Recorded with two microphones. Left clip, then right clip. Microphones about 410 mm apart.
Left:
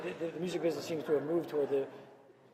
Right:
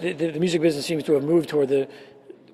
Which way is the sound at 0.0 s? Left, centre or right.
Right.